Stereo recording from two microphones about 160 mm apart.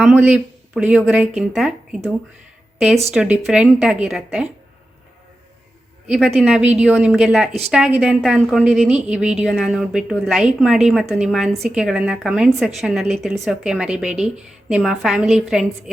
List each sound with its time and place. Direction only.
0.0 s a woman's voice: 10° right (ahead or behind)
6.1 s a woman's voice: 5° right (ahead or behind)